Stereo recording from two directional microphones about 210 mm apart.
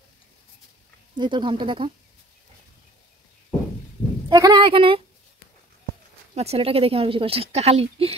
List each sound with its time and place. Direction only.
1.1 s speech: 20° right (ahead or behind)
4.3 s speech: 20° right (ahead or behind)
6.3 s speech: 30° right (ahead or behind)